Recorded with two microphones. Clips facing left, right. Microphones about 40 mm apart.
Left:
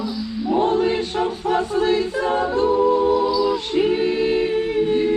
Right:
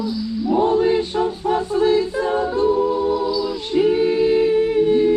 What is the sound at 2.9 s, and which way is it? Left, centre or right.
Music, left.